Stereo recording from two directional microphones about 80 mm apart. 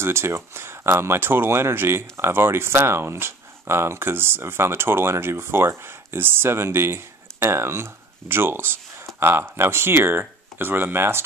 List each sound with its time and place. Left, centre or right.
0.0 s speech: right